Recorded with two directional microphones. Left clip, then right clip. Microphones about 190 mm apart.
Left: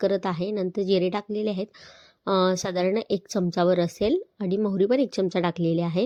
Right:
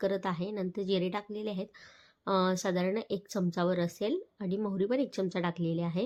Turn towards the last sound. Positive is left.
turn(degrees=35)  # may be behind; listen again after turning